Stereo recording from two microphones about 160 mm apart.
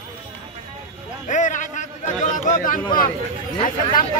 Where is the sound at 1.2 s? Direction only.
50° left (ahead or behind).